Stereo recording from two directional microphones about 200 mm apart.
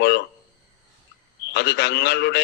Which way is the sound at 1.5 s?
55° left (ahead or behind).